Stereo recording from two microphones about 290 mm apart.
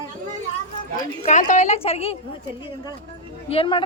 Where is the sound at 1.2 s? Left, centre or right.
Left.